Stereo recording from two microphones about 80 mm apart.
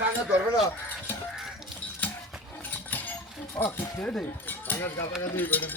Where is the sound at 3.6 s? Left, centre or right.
Centre.